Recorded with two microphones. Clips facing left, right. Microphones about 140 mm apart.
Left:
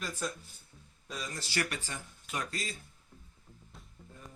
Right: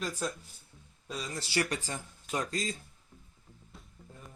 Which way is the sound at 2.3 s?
20° right (ahead or behind).